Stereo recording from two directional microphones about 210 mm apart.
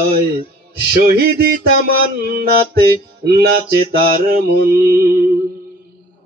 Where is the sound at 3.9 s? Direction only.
45° right (ahead or behind).